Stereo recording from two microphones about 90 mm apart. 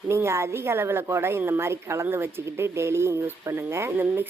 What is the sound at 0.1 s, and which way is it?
A woman's voice, 30° right (ahead or behind).